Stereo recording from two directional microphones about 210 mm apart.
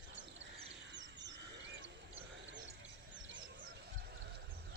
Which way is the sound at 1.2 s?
60° right (ahead or behind).